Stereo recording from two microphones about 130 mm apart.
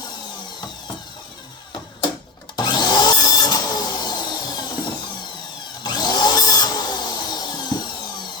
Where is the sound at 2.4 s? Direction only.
35° left (ahead or behind).